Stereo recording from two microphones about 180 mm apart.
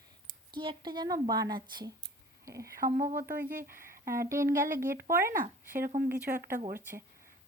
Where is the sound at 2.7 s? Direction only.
50° right (ahead or behind).